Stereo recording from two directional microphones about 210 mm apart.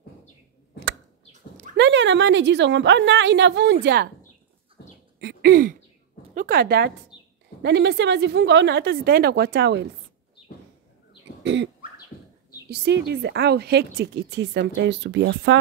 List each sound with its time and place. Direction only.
1.8 s a woman's voice: 60° right (ahead or behind)
4.8 s bird: 50° left (ahead or behind)
5.2 s a sound: 50° right (ahead or behind)
6.3 s a woman's voice: 45° right (ahead or behind)
11.4 s a woman's voice: 60° right (ahead or behind)